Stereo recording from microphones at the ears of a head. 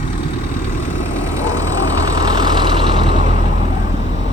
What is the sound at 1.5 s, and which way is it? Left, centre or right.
Vehicle, left.